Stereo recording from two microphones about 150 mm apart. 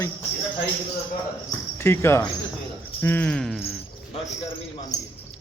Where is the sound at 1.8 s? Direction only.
15° left (ahead or behind); by 3.6 s centre (ahead or behind).